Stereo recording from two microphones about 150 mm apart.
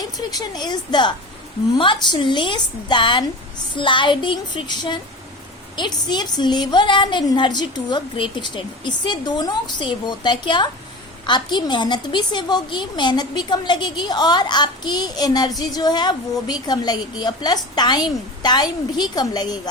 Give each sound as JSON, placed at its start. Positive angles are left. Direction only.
{"t": 0.3, "sound": "a woman's voice", "side_deg": 25}